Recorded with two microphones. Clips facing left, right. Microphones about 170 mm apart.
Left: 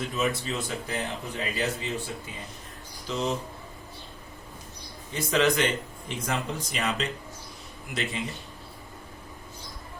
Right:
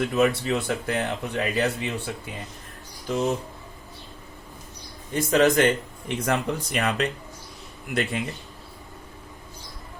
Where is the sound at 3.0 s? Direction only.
50° right (ahead or behind).